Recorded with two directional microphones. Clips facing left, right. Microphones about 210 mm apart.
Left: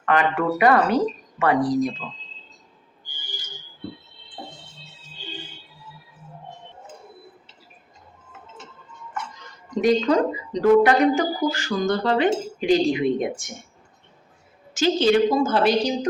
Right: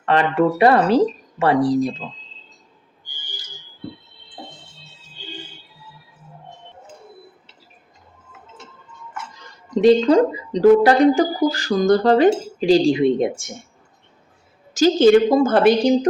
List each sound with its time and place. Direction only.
0.0 s speech: 30° right (ahead or behind)
9.8 s speech: 30° right (ahead or behind)
14.7 s a woman's voice: 40° right (ahead or behind)